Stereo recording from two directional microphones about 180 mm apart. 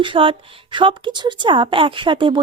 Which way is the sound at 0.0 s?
30° right (ahead or behind).